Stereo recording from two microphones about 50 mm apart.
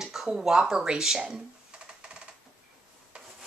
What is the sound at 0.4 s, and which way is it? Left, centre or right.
Speech, centre.